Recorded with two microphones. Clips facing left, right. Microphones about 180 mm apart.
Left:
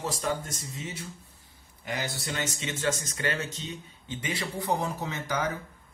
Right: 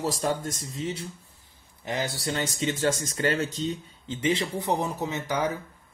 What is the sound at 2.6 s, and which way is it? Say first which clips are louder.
Speech: right 6 dB; 35° right (ahead or behind).